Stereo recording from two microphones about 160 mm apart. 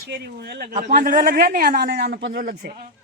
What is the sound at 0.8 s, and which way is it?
A man's voice, 50° right (ahead or behind).